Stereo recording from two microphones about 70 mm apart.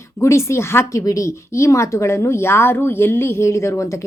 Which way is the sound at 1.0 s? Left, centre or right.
Left.